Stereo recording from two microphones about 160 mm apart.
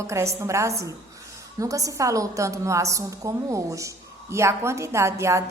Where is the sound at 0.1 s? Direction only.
15° right (ahead or behind).